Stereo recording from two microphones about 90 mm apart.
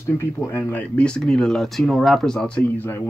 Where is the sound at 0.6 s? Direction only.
20° left (ahead or behind).